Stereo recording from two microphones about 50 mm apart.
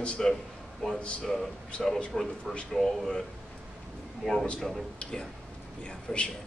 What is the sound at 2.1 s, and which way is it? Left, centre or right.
A man's voice, centre.